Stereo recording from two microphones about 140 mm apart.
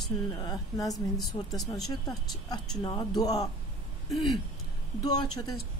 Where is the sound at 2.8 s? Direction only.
30° left (ahead or behind).